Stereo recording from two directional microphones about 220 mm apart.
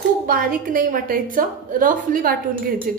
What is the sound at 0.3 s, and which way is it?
A woman's voice, 40° right (ahead or behind).